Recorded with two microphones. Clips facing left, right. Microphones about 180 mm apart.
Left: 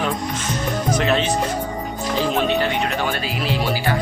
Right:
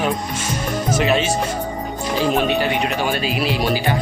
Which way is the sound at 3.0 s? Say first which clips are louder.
Right 3 dB; 15° right (ahead or behind).